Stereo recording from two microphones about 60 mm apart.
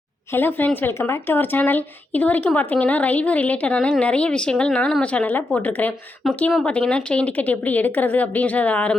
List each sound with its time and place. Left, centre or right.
0.3 s speech: left
0.9 s a woman's voice: left
6.2 s speech: centre
6.7 s speech: centre